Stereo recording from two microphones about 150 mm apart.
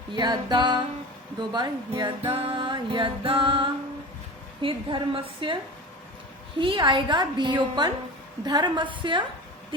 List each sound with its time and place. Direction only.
0.1 s music: 30° right (ahead or behind)
6.6 s music: 35° right (ahead or behind)